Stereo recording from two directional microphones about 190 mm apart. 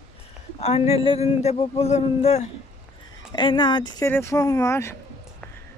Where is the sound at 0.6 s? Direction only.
35° left (ahead or behind).